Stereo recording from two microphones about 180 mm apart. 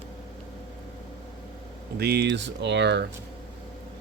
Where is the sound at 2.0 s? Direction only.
65° right (ahead or behind).